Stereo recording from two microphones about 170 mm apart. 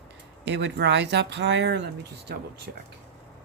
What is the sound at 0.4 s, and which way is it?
Speech, 90° right.